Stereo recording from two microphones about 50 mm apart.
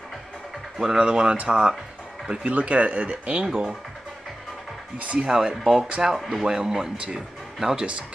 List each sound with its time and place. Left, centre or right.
0.7 s speech: centre
3.4 s speech: centre
4.9 s speech: right
5.6 s speech: centre
6.1 s speech: centre